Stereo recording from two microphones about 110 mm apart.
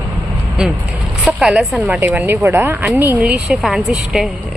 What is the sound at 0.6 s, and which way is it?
A woman's voice, 5° right (ahead or behind).